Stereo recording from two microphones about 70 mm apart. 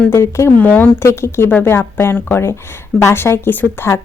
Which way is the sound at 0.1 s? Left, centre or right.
Left.